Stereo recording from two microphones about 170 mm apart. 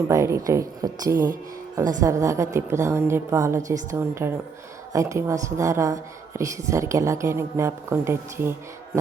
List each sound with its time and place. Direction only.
0.1 s a woman's voice: 15° right (ahead or behind)